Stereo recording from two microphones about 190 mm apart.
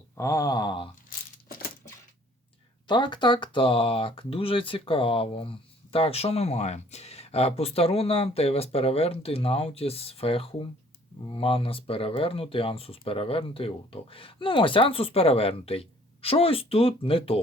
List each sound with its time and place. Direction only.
0.2 s speech: 15° left (ahead or behind)
2.8 s speech: 25° left (ahead or behind)